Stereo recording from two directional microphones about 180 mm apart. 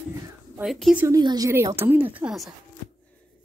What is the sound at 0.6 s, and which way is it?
Speech, centre (ahead or behind).